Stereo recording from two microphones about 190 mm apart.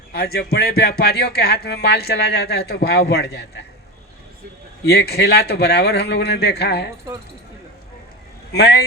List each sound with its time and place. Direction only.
0.1 s speech: 55° left (ahead or behind)
4.9 s speech: 60° left (ahead or behind)
8.5 s speech: 60° left (ahead or behind)